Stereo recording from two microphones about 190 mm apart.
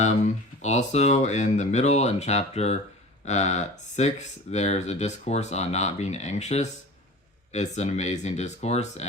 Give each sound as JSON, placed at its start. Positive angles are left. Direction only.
{"t": 0.0, "sound": "speech", "side_deg": 35}